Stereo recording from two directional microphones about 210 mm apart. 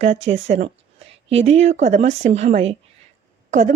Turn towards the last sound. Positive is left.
turn(degrees=-35)  # may be behind; listen again after turning